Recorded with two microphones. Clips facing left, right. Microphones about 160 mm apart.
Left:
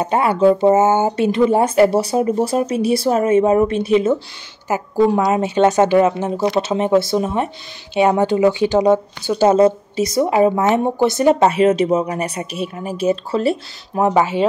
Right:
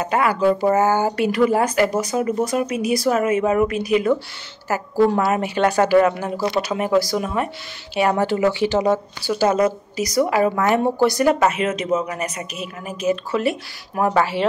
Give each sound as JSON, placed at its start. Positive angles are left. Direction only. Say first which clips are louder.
{"t": 0.0, "sound": "speech", "louder": "left 4 dB", "side_deg": 30}